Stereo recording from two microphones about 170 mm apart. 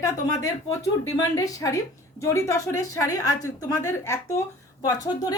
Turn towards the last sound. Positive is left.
turn(degrees=20)  # may be behind; listen again after turning